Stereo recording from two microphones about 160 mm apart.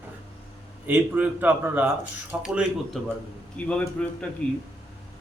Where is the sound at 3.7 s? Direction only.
5° left (ahead or behind).